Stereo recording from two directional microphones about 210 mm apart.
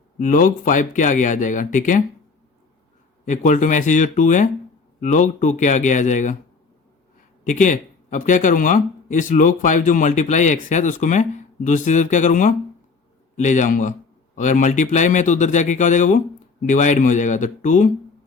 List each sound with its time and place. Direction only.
0.2 s speech: 40° left (ahead or behind)
3.2 s speech: 35° left (ahead or behind)
7.4 s speech: 35° left (ahead or behind)